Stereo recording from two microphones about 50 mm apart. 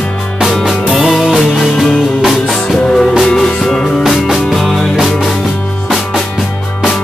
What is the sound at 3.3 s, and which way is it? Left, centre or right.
Music, centre.